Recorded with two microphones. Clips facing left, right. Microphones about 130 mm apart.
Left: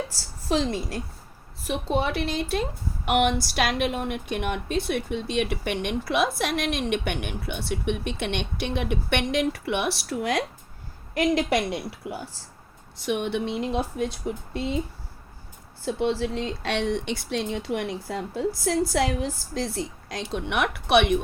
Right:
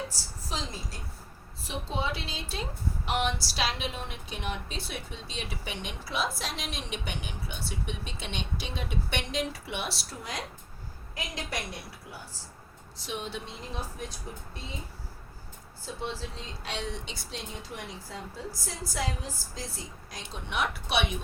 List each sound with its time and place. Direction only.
0.4 s a woman's voice: 75° left (ahead or behind)
1.6 s a woman's voice: 70° left (ahead or behind)
13.1 s speech: 65° left (ahead or behind); by 14.8 s 80° left
15.9 s speech: 75° left (ahead or behind)